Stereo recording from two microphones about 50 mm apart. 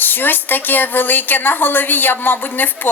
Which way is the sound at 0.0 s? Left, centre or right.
Left.